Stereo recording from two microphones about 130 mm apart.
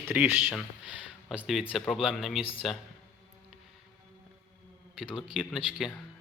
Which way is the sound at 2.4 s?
45° left (ahead or behind).